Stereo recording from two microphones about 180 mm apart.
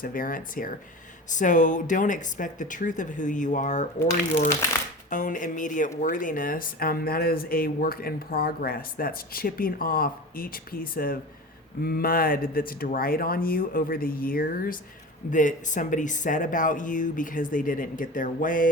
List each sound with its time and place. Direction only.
0.0 s speech: 50° left (ahead or behind)
5.0 s speech: 45° left (ahead or behind)